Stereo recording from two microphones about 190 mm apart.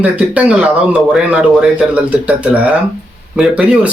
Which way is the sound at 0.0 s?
5° right (ahead or behind).